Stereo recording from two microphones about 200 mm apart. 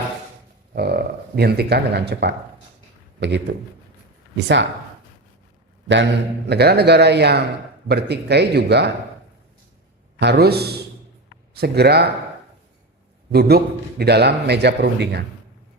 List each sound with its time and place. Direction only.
0.8 s a man's voice: 55° right (ahead or behind)
6.5 s a man's voice: 55° right (ahead or behind)
10.2 s a man's voice: 55° right (ahead or behind)
13.3 s a man's voice: 55° right (ahead or behind)